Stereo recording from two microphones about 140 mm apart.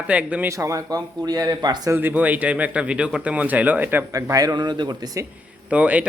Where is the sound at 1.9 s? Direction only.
15° right (ahead or behind).